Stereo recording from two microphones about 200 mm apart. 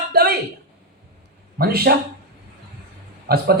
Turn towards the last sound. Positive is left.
turn(degrees=-50)  # may be behind; listen again after turning